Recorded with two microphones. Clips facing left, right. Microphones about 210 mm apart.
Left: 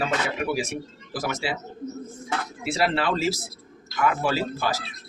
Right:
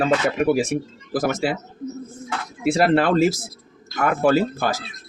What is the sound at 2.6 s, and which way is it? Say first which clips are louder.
Speech: right 8 dB; 50° right (ahead or behind).